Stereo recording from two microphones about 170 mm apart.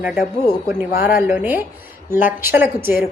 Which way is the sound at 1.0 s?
10° right (ahead or behind).